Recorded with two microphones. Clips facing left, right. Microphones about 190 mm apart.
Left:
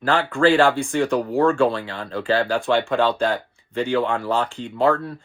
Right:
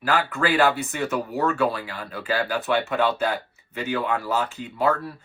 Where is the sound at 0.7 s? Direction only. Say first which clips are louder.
Left 6 dB; 5° right (ahead or behind).